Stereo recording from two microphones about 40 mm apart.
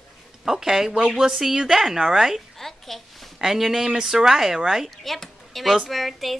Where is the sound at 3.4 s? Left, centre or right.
Centre.